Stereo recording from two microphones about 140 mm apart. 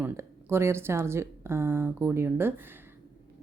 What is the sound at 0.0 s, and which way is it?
A woman's voice, 15° right (ahead or behind).